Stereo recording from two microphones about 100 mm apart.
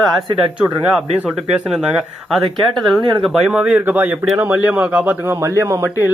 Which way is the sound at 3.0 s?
50° right (ahead or behind).